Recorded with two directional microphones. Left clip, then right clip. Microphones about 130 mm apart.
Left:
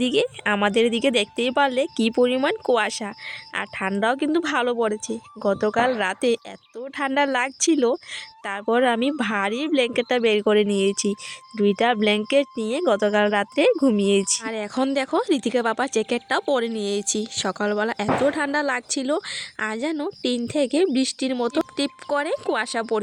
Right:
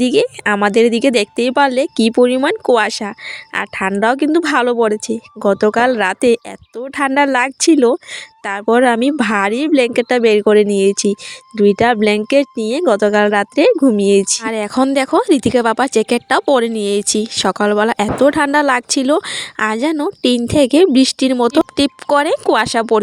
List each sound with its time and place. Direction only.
0.0 s a woman's voice: 35° right (ahead or behind)
14.4 s speech: 50° right (ahead or behind)